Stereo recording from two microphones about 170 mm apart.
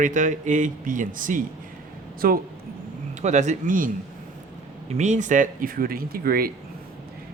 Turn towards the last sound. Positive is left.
turn(degrees=-60)  # may be behind; listen again after turning